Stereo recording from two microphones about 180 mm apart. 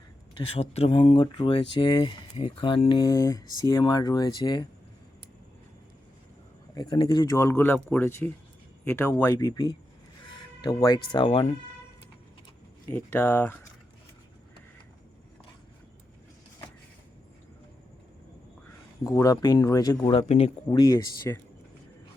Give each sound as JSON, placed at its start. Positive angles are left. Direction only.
{"t": 0.3, "sound": "speech", "side_deg": 30}
{"t": 6.7, "sound": "speech", "side_deg": 25}
{"t": 11.3, "sound": "speech", "side_deg": 40}
{"t": 12.9, "sound": "speech", "side_deg": 10}
{"t": 19.1, "sound": "speech", "side_deg": 20}
{"t": 20.7, "sound": "speech", "side_deg": 20}